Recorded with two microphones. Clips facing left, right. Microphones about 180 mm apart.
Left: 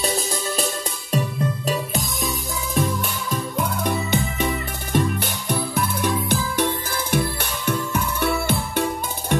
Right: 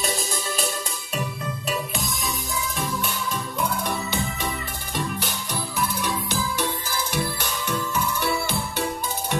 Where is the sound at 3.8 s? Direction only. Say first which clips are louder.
Left 5 dB; 55° left (ahead or behind).